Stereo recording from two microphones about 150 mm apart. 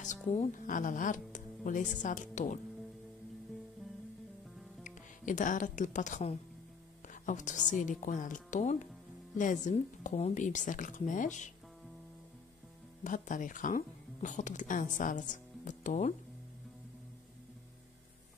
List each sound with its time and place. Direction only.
0.0 s music: 50° left (ahead or behind)
0.6 s speech: 60° left (ahead or behind)
4.8 s speech: 60° left (ahead or behind)
13.0 s speech: 60° left (ahead or behind)